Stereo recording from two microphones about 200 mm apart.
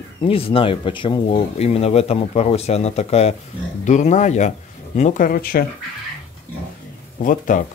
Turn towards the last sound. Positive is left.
turn(degrees=40)  # may be behind; listen again after turning